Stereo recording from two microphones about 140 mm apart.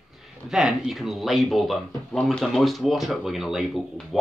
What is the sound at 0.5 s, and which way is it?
Speech, centre (ahead or behind).